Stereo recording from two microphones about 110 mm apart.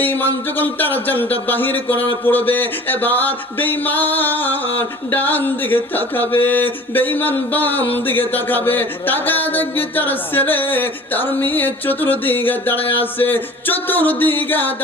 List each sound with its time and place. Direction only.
0.0 s music: 15° left (ahead or behind)